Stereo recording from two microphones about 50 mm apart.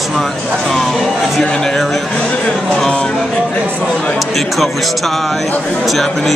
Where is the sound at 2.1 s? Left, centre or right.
Left; by 6.3 s centre.